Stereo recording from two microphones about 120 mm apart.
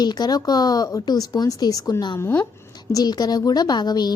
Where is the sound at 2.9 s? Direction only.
35° left (ahead or behind).